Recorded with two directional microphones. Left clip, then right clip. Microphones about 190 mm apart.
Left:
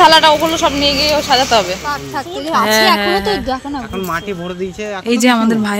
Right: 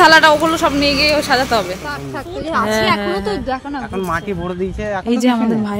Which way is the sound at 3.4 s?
45° left (ahead or behind).